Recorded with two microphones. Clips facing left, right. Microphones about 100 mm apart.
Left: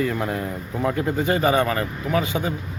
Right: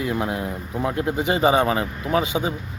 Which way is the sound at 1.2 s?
20° right (ahead or behind).